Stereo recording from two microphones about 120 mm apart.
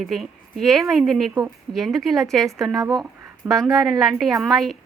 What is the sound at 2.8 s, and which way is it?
Speech, 30° right (ahead or behind).